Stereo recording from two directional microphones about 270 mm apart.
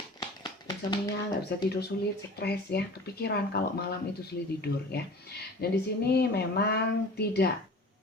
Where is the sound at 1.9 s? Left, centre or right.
Left.